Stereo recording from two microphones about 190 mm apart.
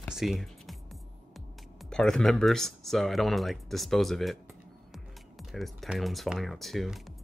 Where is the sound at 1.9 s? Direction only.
5° left (ahead or behind).